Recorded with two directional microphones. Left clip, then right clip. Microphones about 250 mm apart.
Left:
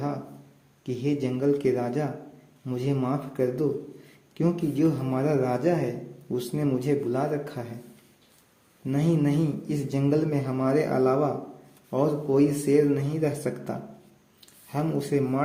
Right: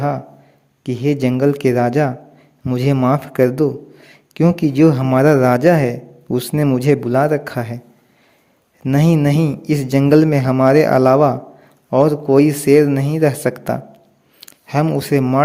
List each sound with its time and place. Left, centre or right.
0.9 s speech: right
8.8 s a man's voice: right